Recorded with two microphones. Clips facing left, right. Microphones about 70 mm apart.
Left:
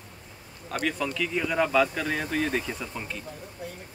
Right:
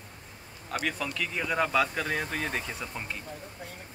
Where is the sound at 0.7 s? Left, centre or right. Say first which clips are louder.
Left 3 dB; centre.